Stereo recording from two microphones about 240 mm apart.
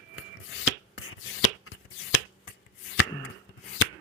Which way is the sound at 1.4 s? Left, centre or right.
Left.